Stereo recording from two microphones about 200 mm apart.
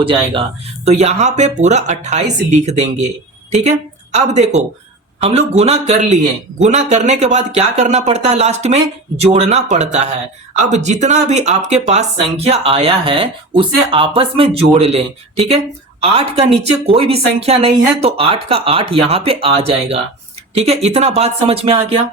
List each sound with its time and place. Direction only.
0.0 s speech: 25° right (ahead or behind)